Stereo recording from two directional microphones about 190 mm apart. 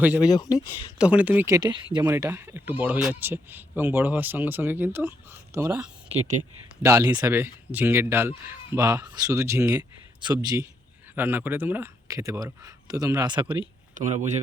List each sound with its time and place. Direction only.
0.0 s speech: 5° right (ahead or behind)
6.1 s speech: 40° right (ahead or behind)
6.8 s speech: 15° right (ahead or behind)
13.9 s speech: 40° right (ahead or behind)